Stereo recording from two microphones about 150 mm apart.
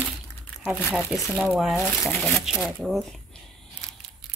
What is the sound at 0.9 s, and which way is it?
Speech, 5° right (ahead or behind).